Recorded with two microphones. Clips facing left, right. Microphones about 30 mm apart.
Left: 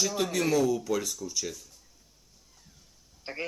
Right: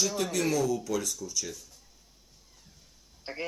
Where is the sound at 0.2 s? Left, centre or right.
Centre.